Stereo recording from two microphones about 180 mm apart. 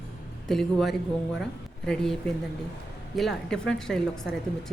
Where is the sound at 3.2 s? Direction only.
Centre (ahead or behind).